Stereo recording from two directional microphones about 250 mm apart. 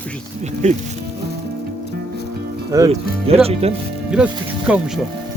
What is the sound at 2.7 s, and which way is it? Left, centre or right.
Speech, centre.